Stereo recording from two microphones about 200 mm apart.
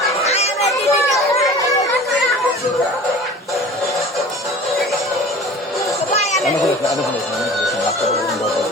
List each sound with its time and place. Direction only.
0.3 s chatter: 30° left (ahead or behind)